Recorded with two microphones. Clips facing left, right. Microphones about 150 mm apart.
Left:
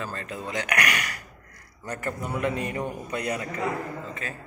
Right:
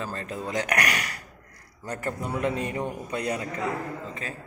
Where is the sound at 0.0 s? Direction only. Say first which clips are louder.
Right 1 dB; 35° right (ahead or behind).